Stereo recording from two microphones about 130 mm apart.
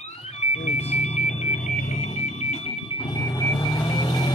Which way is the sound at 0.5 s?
55° left (ahead or behind).